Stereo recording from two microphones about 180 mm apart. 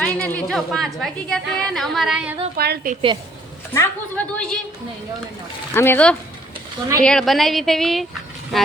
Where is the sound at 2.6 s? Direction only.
60° right (ahead or behind).